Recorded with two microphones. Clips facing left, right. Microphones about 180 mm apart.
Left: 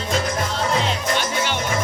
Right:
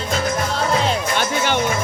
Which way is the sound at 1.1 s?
55° right (ahead or behind).